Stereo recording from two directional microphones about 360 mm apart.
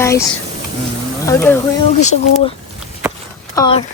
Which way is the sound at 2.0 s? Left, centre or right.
Centre.